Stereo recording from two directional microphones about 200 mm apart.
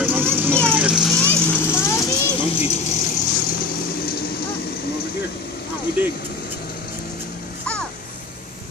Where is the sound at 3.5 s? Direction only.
50° left (ahead or behind).